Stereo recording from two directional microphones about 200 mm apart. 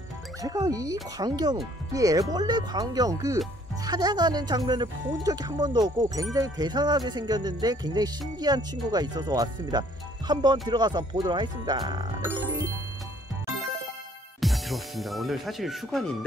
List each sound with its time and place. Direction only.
0.4 s speech: 15° right (ahead or behind)
12.4 s music: 15° right (ahead or behind)
14.4 s speech: centre (ahead or behind)